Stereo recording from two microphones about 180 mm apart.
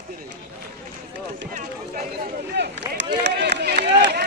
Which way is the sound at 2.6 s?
70° right (ahead or behind).